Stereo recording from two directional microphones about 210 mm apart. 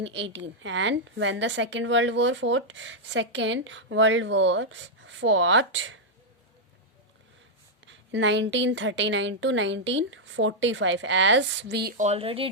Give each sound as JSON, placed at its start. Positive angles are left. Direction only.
{"t": 0.0, "sound": "a woman's voice", "side_deg": -60}
{"t": 7.9, "sound": "a woman's voice", "side_deg": -60}
{"t": 12.0, "sound": "speech", "side_deg": -30}